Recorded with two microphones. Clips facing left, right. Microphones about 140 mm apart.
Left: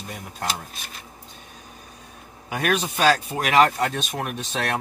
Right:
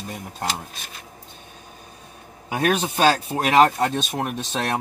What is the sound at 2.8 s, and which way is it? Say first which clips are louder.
Speech: right 3 dB; 35° right (ahead or behind).